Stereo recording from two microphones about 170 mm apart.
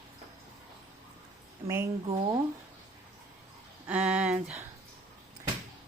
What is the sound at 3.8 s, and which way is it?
Speech, 5° right (ahead or behind).